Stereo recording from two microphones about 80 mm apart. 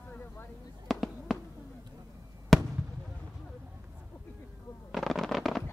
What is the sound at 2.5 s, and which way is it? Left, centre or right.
Fireworks, centre.